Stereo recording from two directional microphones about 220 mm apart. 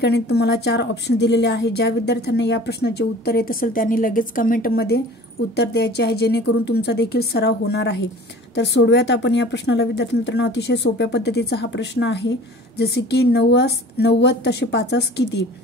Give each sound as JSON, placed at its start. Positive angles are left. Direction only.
{"t": 0.0, "sound": "speech", "side_deg": 50}